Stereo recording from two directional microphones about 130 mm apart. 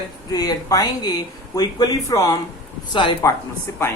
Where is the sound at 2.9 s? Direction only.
40° left (ahead or behind).